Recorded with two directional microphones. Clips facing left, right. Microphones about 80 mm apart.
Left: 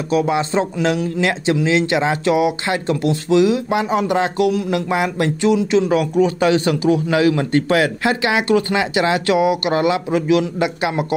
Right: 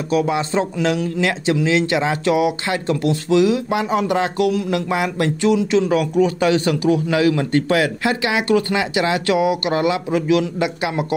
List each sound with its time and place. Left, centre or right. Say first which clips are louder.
0.1 s a man's voice: left 1 dB; left